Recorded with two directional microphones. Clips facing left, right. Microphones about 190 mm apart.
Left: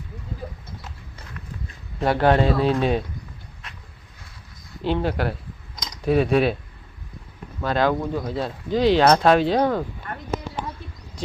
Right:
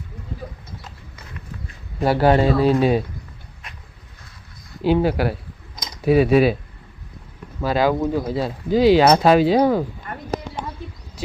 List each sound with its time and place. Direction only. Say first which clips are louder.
2.0 s speech: right 2 dB; 5° right (ahead or behind)
4.8 s speech: right 5 dB; 5° right (ahead or behind)
7.6 s speech: right 3 dB; 5° right (ahead or behind)
10.3 s a sound: right 2 dB; 40° right (ahead or behind)